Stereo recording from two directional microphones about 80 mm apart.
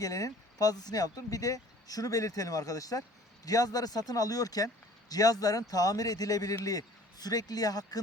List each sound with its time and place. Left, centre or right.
0.0 s speech: left